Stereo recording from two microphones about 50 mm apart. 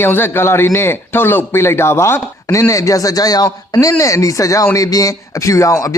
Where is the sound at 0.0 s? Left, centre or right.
Left.